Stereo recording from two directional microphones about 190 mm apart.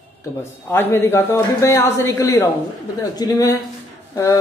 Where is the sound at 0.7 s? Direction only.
10° left (ahead or behind).